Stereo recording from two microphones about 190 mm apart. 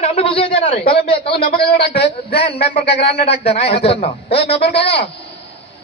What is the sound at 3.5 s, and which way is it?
Speech, 30° left (ahead or behind).